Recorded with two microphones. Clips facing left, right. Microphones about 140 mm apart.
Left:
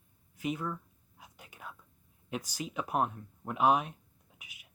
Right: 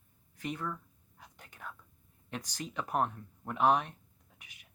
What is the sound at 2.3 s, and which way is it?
Speech, 10° left (ahead or behind).